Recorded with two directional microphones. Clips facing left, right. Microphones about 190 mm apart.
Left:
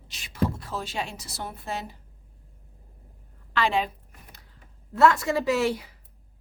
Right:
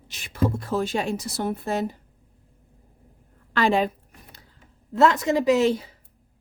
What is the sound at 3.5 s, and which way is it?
Speech, 45° right (ahead or behind).